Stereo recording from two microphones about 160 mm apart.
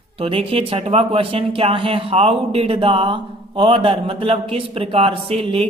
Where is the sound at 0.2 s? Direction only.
35° right (ahead or behind).